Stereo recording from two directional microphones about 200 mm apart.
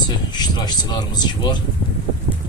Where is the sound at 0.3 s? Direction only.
20° left (ahead or behind).